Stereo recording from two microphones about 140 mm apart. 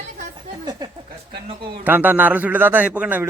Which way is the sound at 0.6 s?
30° right (ahead or behind).